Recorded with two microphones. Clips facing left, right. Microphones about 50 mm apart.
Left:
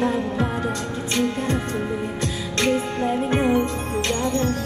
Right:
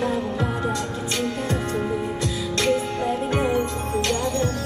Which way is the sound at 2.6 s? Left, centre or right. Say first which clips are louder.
Left 1 dB; left.